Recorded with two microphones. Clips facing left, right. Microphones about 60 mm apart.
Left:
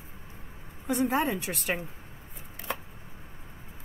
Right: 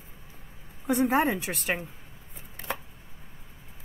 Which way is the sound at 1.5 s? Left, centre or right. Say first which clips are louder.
Right 1 dB; centre.